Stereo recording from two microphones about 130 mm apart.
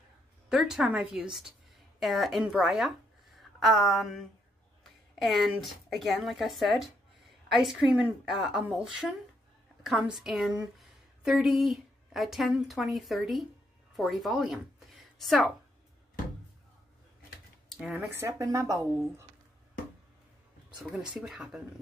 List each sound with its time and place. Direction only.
0.5 s a woman's voice: 5° right (ahead or behind)
17.6 s a sound: 5° right (ahead or behind)
17.9 s speech: 20° right (ahead or behind)
20.9 s speech: 5° right (ahead or behind)